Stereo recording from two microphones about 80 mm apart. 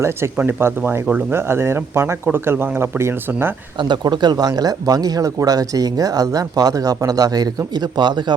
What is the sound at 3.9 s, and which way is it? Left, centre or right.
Speech, right.